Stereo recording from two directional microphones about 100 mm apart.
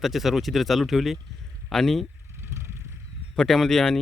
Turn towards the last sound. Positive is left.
turn(degrees=5)  # may be behind; listen again after turning